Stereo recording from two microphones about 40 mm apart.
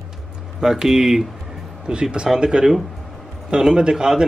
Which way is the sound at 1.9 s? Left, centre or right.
Right.